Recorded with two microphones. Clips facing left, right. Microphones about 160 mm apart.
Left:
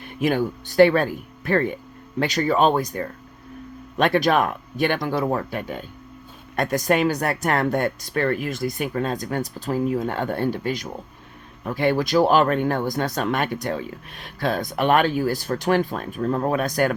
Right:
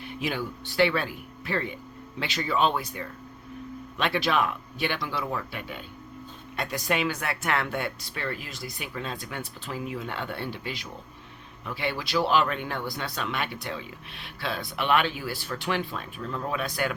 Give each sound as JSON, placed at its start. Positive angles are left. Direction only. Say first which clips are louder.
{"t": 0.0, "sound": "speech", "louder": "left 9 dB", "side_deg": 50}